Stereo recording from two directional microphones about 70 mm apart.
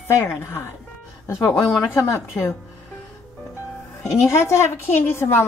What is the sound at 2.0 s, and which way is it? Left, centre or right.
Speech, left.